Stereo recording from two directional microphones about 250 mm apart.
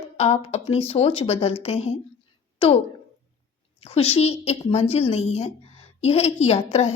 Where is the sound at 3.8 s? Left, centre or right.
Left.